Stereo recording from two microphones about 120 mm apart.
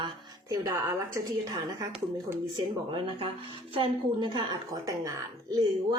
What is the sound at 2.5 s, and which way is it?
A woman's voice, 45° right (ahead or behind).